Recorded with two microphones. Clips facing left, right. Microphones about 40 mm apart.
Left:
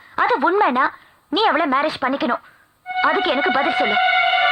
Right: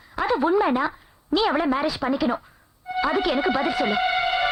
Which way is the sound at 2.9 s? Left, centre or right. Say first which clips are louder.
Left 4 dB; left.